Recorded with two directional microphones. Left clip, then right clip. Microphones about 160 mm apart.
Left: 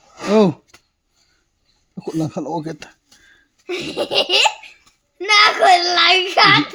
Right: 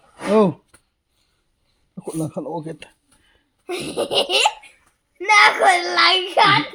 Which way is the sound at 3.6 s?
30° right (ahead or behind).